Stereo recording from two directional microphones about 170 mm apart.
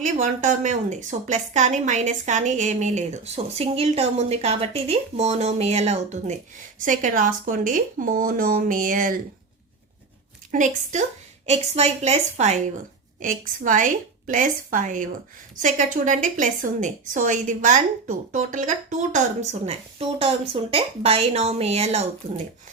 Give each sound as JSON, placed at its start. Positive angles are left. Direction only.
{"t": 0.0, "sound": "a woman's voice", "side_deg": -45}
{"t": 10.5, "sound": "a woman's voice", "side_deg": -45}